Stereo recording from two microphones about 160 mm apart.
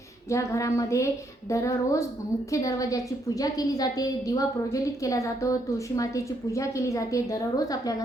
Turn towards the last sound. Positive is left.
turn(degrees=20)  # may be behind; listen again after turning